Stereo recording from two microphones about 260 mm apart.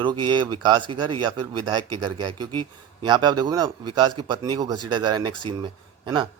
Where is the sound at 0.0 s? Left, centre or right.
Centre.